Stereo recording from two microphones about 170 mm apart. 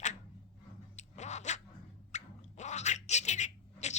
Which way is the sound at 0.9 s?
45° left (ahead or behind).